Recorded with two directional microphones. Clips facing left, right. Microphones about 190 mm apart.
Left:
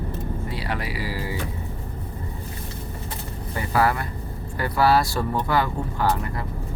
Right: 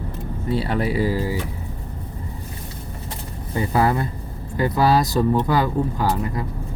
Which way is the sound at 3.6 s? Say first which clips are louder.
Right 3 dB; 20° right (ahead or behind).